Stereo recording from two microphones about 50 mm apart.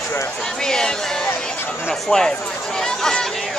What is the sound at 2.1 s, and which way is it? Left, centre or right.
Speech, centre.